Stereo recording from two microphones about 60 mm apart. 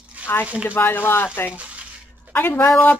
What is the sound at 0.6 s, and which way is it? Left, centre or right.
Speech, left.